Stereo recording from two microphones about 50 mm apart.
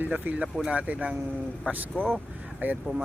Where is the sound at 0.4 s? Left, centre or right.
Centre.